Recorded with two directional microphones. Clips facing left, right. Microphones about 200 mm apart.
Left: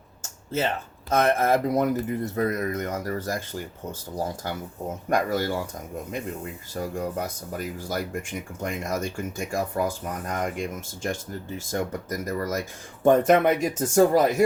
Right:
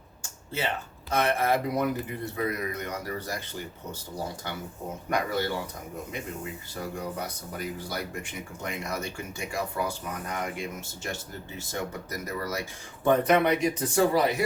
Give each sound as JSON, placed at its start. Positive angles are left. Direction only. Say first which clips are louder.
{"t": 0.2, "sound": "a sound", "louder": "left 6 dB", "side_deg": 45}
{"t": 1.1, "sound": "speech", "louder": "left 4 dB", "side_deg": 45}
{"t": 5.0, "sound": "speech", "louder": "left 4 dB", "side_deg": 45}
{"t": 6.7, "sound": "speech", "louder": "left 5 dB", "side_deg": 50}